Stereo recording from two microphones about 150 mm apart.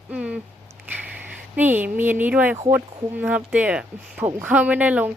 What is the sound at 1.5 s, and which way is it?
Speech, 10° right (ahead or behind).